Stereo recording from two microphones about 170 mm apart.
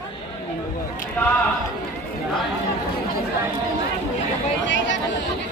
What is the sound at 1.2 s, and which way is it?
Speech, 10° left (ahead or behind).